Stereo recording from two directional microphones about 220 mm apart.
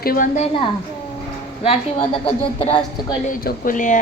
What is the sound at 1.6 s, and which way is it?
A woman's voice, 25° left (ahead or behind).